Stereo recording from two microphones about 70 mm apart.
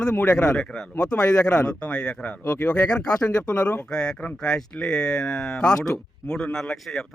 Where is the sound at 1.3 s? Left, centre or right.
Left.